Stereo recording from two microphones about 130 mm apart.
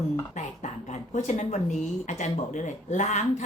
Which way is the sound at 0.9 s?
65° left (ahead or behind).